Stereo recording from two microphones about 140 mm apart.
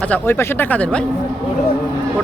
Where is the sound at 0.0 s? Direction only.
10° left (ahead or behind).